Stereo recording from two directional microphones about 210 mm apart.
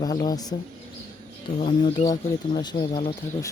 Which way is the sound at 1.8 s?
20° left (ahead or behind).